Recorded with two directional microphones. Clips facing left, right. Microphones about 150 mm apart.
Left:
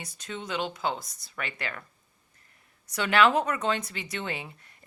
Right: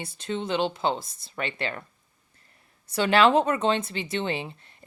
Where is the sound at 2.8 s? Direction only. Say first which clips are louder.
Right 3 dB; 30° right (ahead or behind).